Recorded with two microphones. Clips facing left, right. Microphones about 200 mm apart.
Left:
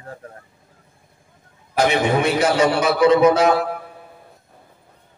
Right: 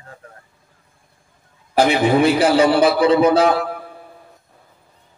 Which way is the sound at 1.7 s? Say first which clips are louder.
Right 3 dB; 30° right (ahead or behind).